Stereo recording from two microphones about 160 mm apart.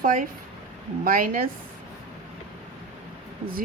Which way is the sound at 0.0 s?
55° right (ahead or behind).